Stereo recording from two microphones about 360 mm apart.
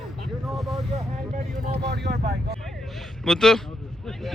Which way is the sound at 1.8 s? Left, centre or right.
Right.